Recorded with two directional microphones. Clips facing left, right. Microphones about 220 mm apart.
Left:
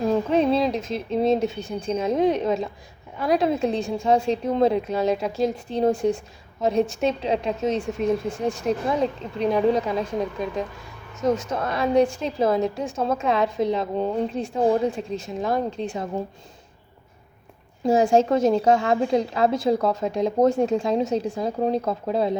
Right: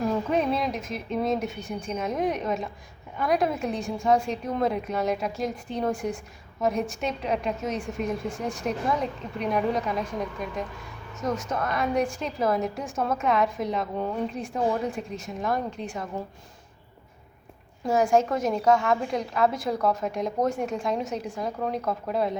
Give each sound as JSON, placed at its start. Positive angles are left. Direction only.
{"t": 0.1, "sound": "a woman's voice", "side_deg": 30}
{"t": 17.8, "sound": "a woman's voice", "side_deg": 25}